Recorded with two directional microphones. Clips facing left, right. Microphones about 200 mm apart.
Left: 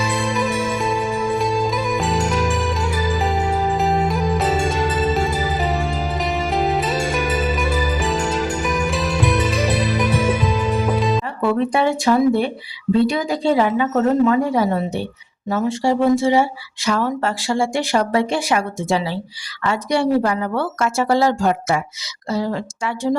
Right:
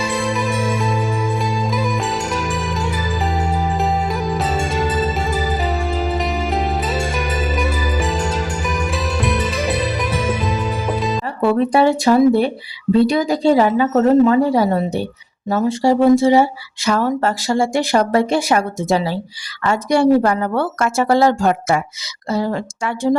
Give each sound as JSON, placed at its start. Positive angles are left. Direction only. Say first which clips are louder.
{"t": 0.3, "sound": "music", "louder": "right 1 dB", "side_deg": 0}
{"t": 11.3, "sound": "a woman's voice", "louder": "right 6 dB", "side_deg": -35}